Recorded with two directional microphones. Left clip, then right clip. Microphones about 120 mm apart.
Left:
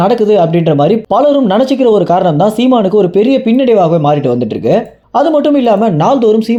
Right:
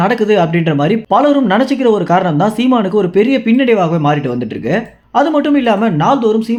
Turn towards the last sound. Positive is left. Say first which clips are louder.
# left 3 dB
turn(degrees=35)  # may be behind; listen again after turning